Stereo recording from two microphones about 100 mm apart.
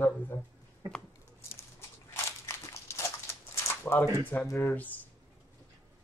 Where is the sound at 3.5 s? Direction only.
20° left (ahead or behind).